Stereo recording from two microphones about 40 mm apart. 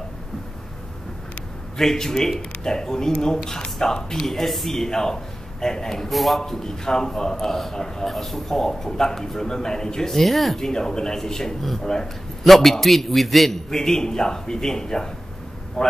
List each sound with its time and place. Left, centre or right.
1.8 s a man's voice: centre
6.4 s a man's voice: centre
10.6 s a man's voice: centre
13.7 s a man's voice: centre